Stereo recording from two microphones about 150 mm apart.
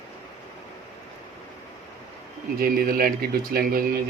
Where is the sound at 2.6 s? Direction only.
75° right (ahead or behind).